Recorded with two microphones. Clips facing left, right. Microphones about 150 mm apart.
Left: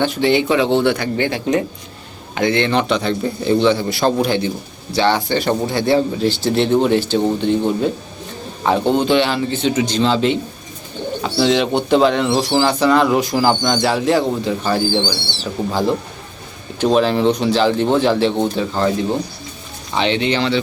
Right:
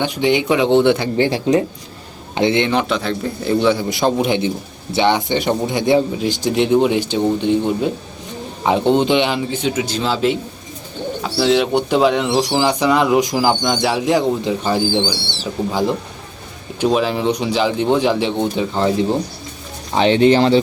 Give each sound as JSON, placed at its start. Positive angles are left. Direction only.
{"t": 0.0, "sound": "a man's voice", "side_deg": -15}
{"t": 2.6, "sound": "a man's voice", "side_deg": -5}
{"t": 20.0, "sound": "speech", "side_deg": -40}